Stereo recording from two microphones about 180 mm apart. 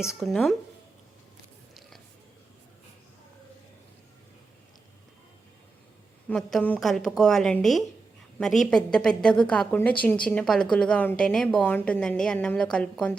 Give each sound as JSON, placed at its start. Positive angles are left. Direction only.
{"t": 0.2, "sound": "a woman's voice", "side_deg": 0}
{"t": 6.2, "sound": "a woman's voice", "side_deg": 5}